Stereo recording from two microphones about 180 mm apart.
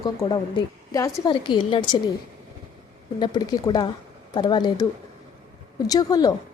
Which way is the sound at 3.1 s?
25° left (ahead or behind).